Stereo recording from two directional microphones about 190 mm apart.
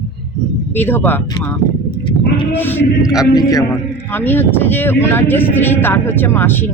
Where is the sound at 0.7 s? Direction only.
10° left (ahead or behind).